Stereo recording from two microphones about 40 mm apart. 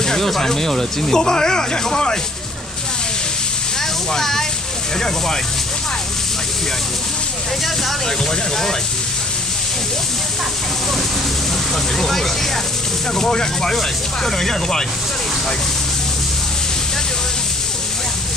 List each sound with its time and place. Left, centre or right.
0.0 s speech: centre
4.1 s speech: centre
12.0 s speech: centre